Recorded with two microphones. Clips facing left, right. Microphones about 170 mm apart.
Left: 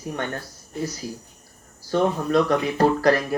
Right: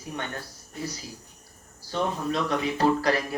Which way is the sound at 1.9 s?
50° left (ahead or behind).